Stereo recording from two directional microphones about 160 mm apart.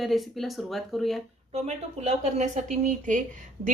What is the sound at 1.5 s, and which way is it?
A woman's voice, 45° right (ahead or behind).